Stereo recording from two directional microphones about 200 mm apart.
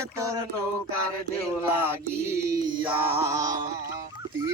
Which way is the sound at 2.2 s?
15° right (ahead or behind).